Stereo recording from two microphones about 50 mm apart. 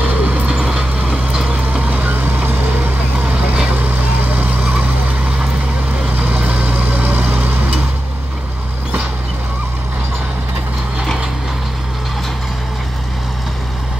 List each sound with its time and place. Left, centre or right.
0.0 s vehicle: right
1.0 s a sound: centre
1.5 s vehicle: right
6.1 s vehicle: right